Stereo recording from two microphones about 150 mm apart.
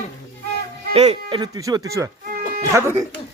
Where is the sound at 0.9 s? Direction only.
40° right (ahead or behind); by 2.9 s 15° right (ahead or behind).